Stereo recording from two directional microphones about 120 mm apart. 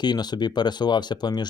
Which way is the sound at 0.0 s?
35° left (ahead or behind).